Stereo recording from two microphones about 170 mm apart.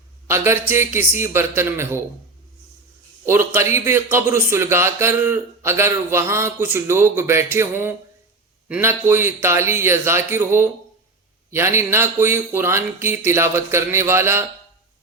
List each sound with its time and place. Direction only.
0.3 s speech: 15° right (ahead or behind)
3.2 s speech: 15° right (ahead or behind)